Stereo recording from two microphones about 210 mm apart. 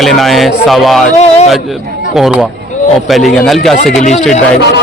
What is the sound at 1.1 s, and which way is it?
Speech, 30° left (ahead or behind).